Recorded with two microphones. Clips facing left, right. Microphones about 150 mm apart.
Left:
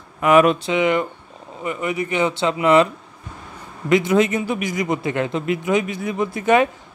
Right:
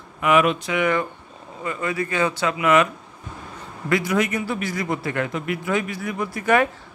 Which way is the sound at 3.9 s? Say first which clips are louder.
Left 5 dB; 25° left (ahead or behind).